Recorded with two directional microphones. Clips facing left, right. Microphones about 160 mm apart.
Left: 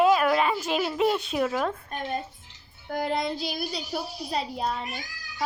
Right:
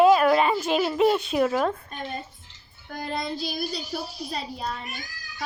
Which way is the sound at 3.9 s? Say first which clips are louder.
Left 1 dB; 20° left (ahead or behind).